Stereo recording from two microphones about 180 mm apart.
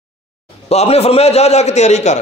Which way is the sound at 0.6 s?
35° left (ahead or behind).